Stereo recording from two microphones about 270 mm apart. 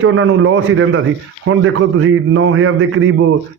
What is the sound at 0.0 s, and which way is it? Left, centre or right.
A man's voice, right.